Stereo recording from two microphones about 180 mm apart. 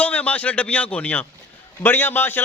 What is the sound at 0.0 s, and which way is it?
A man's voice, 10° left (ahead or behind).